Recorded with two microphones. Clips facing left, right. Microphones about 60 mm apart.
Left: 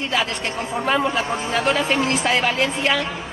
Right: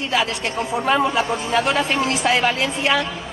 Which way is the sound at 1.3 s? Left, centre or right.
Left.